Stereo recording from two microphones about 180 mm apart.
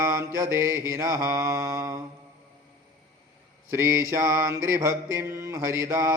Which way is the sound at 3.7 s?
15° right (ahead or behind).